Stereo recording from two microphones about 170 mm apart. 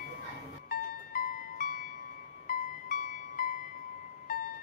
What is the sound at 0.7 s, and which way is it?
Music, 55° left (ahead or behind).